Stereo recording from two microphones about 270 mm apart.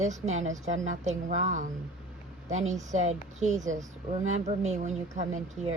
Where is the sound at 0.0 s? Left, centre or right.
Right.